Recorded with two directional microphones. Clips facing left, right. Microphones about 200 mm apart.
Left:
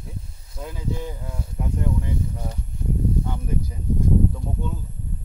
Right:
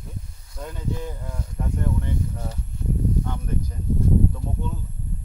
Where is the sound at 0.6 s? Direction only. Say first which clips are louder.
Left 1 dB; 5° left (ahead or behind).